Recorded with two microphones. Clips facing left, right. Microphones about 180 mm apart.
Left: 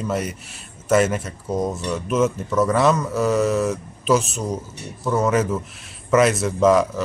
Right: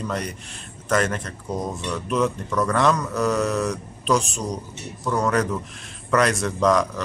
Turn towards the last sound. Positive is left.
turn(degrees=5)  # may be behind; listen again after turning